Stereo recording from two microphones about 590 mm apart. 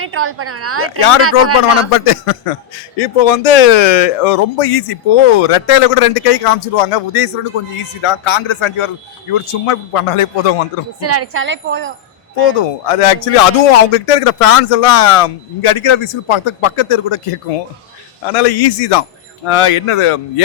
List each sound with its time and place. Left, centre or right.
0.0 s a woman's voice: right
1.9 s a man's voice: left
3.0 s speech: left
11.0 s a woman's voice: right
12.5 s speech: left
18.3 s a man's voice: left
19.5 s speech: left